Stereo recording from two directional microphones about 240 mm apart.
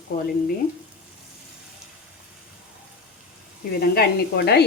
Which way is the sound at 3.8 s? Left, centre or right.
Left.